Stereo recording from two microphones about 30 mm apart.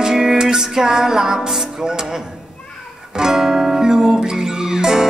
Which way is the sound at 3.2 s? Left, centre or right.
Centre.